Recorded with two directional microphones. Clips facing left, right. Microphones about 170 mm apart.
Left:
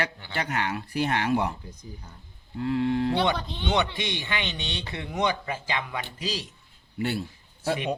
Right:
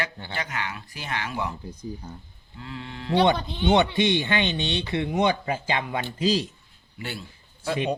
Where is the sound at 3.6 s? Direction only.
30° right (ahead or behind).